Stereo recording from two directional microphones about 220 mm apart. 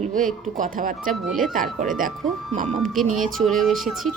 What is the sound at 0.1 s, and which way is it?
Speech, 40° right (ahead or behind).